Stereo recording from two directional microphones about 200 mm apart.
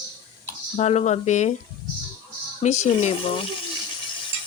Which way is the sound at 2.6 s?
35° left (ahead or behind).